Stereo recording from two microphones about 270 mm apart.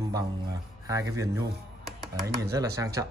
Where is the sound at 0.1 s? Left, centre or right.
Centre.